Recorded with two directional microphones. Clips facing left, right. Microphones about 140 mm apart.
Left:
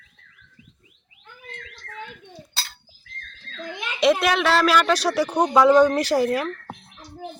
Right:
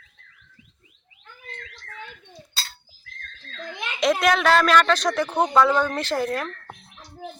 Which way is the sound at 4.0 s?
5° left (ahead or behind).